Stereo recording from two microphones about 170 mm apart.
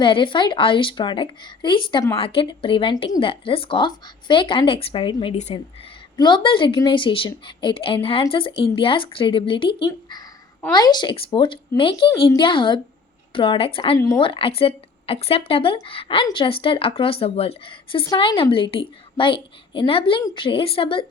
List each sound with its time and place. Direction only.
0.0 s a woman's voice: 30° left (ahead or behind)